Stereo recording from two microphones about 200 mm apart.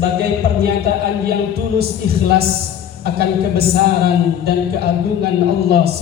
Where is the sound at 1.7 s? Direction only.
50° right (ahead or behind).